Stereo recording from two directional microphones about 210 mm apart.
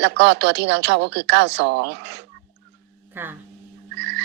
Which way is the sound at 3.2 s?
10° right (ahead or behind).